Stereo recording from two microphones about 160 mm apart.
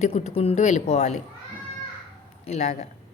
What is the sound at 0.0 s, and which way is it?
A woman's voice, 40° left (ahead or behind).